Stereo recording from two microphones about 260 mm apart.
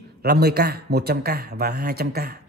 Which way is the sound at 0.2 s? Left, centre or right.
Right.